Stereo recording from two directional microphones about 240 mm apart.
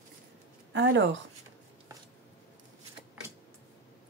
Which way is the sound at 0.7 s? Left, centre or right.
Right.